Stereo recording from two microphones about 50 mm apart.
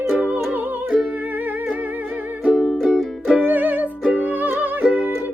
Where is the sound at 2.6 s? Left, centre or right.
Centre.